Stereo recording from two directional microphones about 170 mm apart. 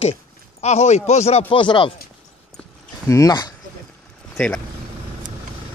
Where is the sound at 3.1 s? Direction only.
20° left (ahead or behind).